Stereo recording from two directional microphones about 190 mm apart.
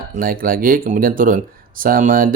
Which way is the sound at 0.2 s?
50° right (ahead or behind).